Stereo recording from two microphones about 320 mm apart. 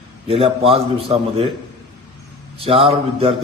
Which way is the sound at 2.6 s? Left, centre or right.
Centre.